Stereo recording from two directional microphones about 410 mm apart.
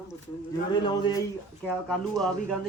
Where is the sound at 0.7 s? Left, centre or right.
Centre.